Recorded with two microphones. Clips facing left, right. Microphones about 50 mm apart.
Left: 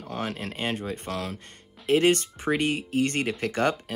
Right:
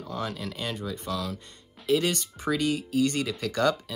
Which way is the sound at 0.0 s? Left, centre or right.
Left.